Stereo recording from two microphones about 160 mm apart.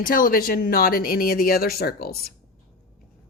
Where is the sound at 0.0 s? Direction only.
60° left (ahead or behind).